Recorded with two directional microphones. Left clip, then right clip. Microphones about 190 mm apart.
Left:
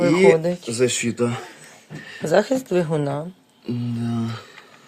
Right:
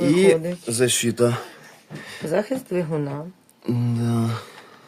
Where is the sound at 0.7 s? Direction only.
40° right (ahead or behind).